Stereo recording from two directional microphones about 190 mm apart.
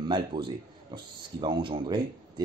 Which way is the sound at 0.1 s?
25° right (ahead or behind).